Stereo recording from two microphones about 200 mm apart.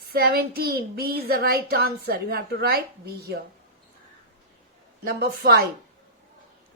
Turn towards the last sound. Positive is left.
turn(degrees=-50)  # may be behind; listen again after turning